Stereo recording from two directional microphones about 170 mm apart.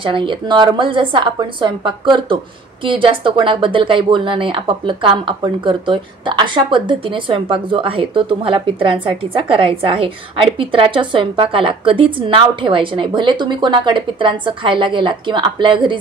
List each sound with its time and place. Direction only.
0.0 s speech: 30° right (ahead or behind)